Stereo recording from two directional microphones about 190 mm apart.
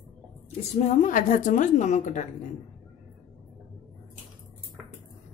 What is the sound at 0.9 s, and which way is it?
A woman's voice, 45° left (ahead or behind).